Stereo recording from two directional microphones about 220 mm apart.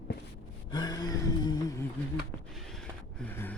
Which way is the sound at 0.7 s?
20° left (ahead or behind).